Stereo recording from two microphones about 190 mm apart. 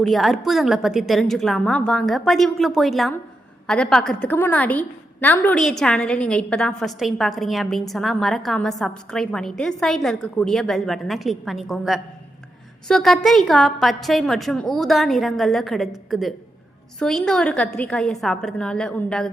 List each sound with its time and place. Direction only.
0.0 s a woman's voice: centre (ahead or behind)
17.0 s a woman's voice: 5° left (ahead or behind)